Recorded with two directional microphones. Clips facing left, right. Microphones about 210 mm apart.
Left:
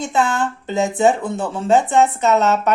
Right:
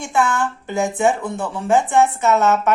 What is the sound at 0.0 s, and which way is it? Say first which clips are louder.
Speech: left 1 dB; 20° left (ahead or behind).